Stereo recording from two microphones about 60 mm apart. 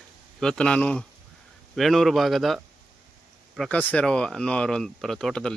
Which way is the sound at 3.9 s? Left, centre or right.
Centre.